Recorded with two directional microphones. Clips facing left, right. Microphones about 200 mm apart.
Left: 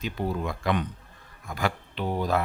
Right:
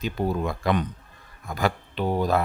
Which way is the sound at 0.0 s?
40° right (ahead or behind).